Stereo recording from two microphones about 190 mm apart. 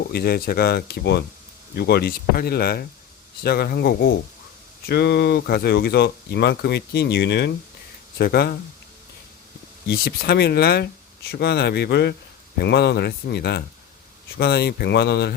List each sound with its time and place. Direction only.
0.1 s speech: 55° left (ahead or behind)
9.9 s speech: 55° left (ahead or behind)